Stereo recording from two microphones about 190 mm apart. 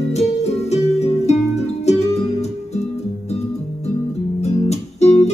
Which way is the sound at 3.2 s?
35° left (ahead or behind).